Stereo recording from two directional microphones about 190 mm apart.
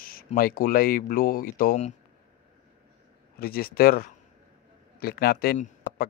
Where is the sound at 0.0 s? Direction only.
50° left (ahead or behind).